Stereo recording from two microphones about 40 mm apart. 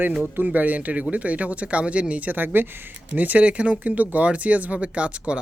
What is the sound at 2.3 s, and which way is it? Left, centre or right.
Speech, right.